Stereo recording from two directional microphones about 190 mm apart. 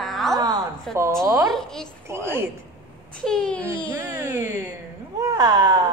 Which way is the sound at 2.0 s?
15° right (ahead or behind).